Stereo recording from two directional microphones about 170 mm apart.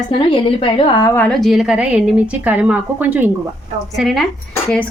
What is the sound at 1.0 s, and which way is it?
A woman's voice, 10° left (ahead or behind).